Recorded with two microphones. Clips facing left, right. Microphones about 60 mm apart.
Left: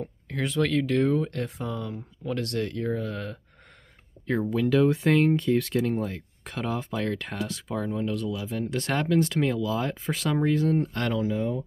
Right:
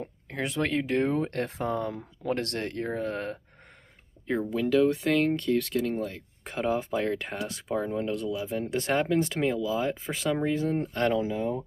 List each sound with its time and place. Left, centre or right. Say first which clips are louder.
0.3 s speech: left 3 dB; right
4.5 s speech: left 1 dB; centre
6.4 s speech: right 3 dB; right